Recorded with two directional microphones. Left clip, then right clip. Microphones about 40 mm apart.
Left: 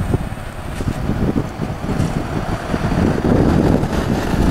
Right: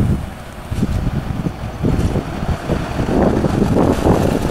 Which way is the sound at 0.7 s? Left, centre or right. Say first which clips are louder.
Even; centre.